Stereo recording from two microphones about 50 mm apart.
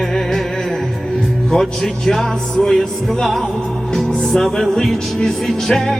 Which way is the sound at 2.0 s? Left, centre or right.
Centre.